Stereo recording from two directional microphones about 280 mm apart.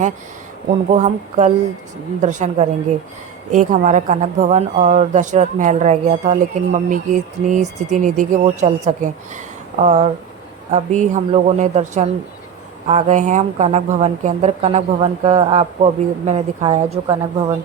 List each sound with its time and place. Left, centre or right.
0.9 s speech: right